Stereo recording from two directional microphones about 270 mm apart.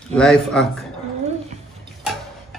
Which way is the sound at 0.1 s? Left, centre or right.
Centre.